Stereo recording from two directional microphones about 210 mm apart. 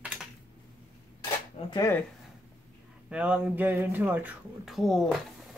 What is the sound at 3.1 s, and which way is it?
Speech, 5° right (ahead or behind).